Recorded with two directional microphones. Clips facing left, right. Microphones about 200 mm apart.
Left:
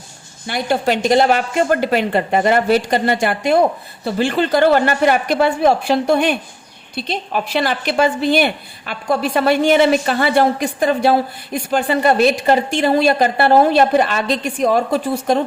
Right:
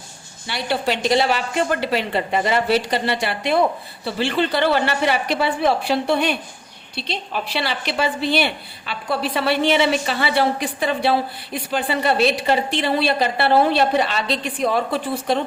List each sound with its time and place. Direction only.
0.4 s a woman's voice: 50° left (ahead or behind)